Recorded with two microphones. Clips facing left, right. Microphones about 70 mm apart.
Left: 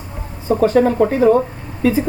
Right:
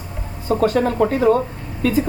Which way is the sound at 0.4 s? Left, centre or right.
Centre.